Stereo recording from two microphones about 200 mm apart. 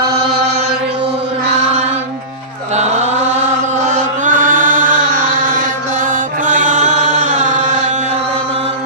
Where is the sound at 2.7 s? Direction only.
35° right (ahead or behind).